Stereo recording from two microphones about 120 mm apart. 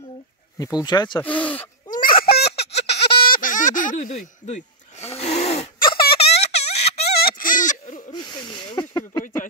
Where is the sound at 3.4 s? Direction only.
90° left.